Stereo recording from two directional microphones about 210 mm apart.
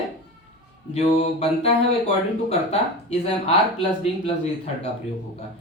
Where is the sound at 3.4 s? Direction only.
25° left (ahead or behind).